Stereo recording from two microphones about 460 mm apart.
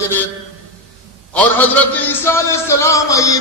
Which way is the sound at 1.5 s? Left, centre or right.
Centre.